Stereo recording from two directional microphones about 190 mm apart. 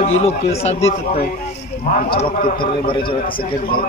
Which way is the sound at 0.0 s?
35° left (ahead or behind).